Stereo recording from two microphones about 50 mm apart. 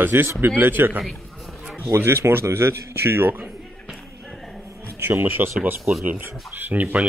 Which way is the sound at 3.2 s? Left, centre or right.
Right.